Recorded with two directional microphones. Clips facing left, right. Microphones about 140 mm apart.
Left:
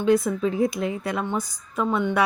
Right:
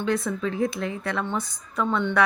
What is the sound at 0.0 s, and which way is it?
A woman's voice, 15° left (ahead or behind).